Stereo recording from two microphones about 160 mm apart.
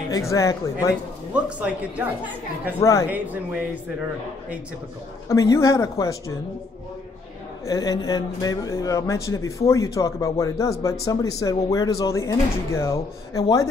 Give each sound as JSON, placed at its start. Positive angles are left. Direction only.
{"t": 0.1, "sound": "speech", "side_deg": 20}
{"t": 1.3, "sound": "speech", "side_deg": -10}
{"t": 2.8, "sound": "speech", "side_deg": 20}
{"t": 5.3, "sound": "speech", "side_deg": 20}
{"t": 7.6, "sound": "speech", "side_deg": 20}